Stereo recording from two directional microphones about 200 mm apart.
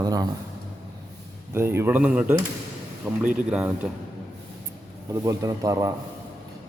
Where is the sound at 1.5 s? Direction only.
10° right (ahead or behind).